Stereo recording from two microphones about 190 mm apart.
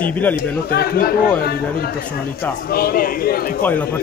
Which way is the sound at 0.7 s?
55° left (ahead or behind).